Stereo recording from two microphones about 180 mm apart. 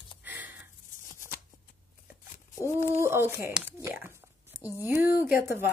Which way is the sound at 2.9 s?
15° right (ahead or behind).